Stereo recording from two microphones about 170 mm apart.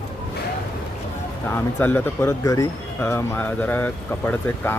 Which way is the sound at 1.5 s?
10° left (ahead or behind).